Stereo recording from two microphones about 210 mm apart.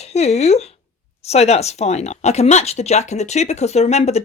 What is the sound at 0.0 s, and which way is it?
Speech, 30° left (ahead or behind).